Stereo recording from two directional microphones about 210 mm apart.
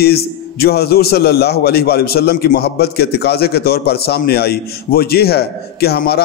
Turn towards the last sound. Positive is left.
turn(degrees=50)  # may be behind; listen again after turning